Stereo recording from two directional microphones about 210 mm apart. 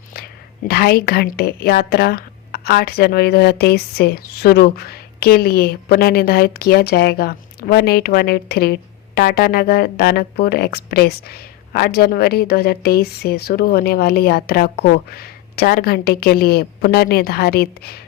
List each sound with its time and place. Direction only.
0.7 s speech: 50° left (ahead or behind)